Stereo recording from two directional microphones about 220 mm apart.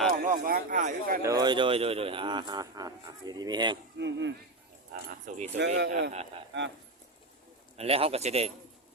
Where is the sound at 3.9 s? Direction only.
55° right (ahead or behind).